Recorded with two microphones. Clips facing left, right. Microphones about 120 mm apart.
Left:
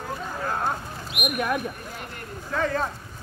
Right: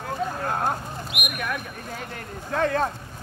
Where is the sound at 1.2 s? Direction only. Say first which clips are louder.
Left 6 dB; 30° left (ahead or behind).